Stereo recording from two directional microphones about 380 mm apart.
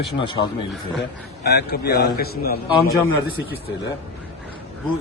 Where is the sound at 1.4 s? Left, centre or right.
Left.